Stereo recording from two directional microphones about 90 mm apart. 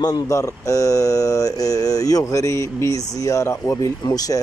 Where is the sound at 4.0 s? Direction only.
45° left (ahead or behind).